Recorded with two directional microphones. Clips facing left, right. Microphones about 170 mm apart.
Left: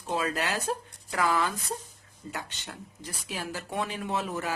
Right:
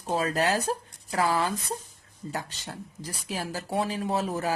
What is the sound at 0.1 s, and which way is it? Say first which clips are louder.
Speech: right 4 dB; 40° right (ahead or behind).